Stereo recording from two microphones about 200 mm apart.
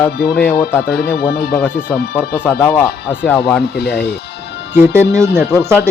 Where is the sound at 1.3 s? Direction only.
50° left (ahead or behind).